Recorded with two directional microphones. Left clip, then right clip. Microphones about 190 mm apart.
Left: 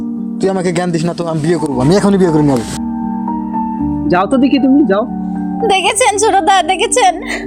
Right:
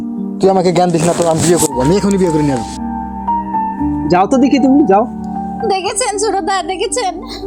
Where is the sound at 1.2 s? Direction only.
35° left (ahead or behind).